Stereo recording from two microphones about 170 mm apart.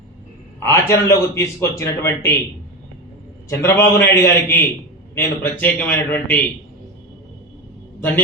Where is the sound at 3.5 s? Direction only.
15° left (ahead or behind).